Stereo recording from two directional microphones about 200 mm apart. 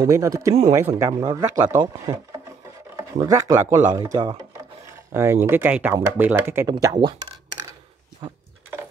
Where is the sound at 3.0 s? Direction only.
15° right (ahead or behind).